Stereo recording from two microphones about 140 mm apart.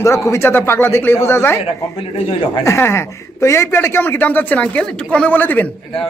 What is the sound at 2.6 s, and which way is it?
Speech, 20° left (ahead or behind).